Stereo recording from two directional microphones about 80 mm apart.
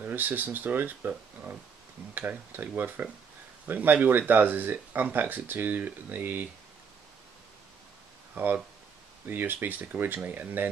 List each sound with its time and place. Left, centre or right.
0.0 s speech: right
2.1 s speech: right
8.4 s speech: right